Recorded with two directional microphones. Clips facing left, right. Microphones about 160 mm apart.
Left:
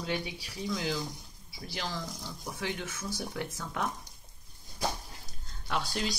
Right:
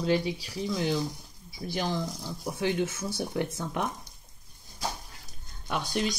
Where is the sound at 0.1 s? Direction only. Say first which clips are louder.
Right 9 dB; 25° right (ahead or behind).